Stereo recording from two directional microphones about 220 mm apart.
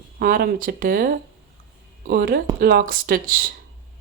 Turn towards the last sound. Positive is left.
turn(degrees=-40)  # may be behind; listen again after turning